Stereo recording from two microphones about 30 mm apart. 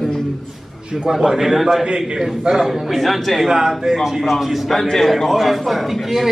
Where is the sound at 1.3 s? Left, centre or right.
Centre.